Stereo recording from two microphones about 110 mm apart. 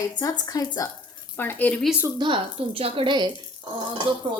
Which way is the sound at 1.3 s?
15° left (ahead or behind).